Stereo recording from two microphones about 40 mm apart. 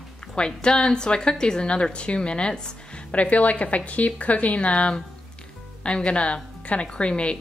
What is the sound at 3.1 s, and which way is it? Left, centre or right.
A woman's voice, left.